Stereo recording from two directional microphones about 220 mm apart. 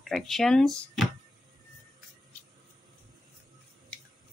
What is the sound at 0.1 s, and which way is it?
Speech, centre (ahead or behind).